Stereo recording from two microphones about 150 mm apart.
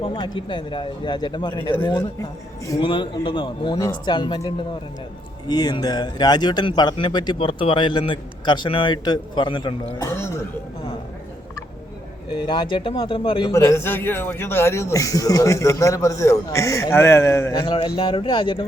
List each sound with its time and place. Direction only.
0.0 s speech: 30° left (ahead or behind)
2.8 s speech: 35° left (ahead or behind)
12.3 s speech: 35° left (ahead or behind)
13.5 s a man's voice: 20° left (ahead or behind)
17.7 s speech: 35° left (ahead or behind)